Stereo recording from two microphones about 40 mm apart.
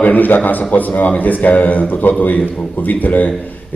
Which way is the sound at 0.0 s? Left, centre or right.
Left.